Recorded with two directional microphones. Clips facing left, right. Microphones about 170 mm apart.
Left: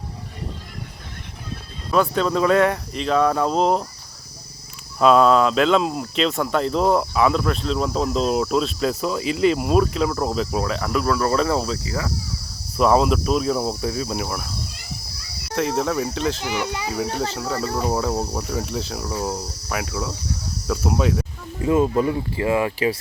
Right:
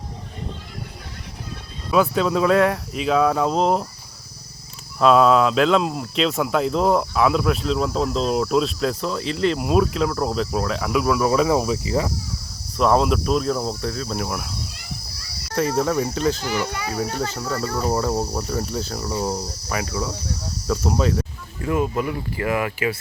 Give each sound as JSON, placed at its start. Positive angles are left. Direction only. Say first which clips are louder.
{"t": 1.9, "sound": "speech", "louder": "right 1 dB", "side_deg": -5}
{"t": 4.9, "sound": "speech", "louder": "even", "side_deg": 0}
{"t": 12.7, "sound": "speech", "louder": "left 1 dB", "side_deg": 0}
{"t": 14.3, "sound": "speech", "louder": "right 1 dB", "side_deg": -5}
{"t": 15.5, "sound": "speech", "louder": "right 1 dB", "side_deg": 0}
{"t": 16.4, "sound": "speech", "louder": "right 1 dB", "side_deg": 15}
{"t": 17.7, "sound": "speech", "louder": "right 1 dB", "side_deg": 0}
{"t": 21.6, "sound": "speech", "louder": "left 4 dB", "side_deg": 25}